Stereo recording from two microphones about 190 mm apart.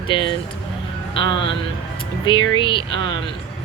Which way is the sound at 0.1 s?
25° left (ahead or behind).